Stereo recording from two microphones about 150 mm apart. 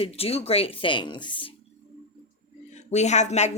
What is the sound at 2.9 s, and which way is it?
Speech, 50° left (ahead or behind).